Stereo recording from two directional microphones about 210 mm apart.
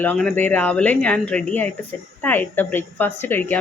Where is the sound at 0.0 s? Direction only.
5° left (ahead or behind).